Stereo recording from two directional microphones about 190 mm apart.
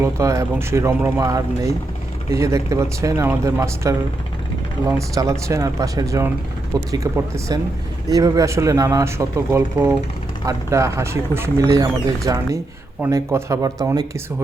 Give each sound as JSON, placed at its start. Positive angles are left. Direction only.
{"t": 0.0, "sound": "speech", "side_deg": -15}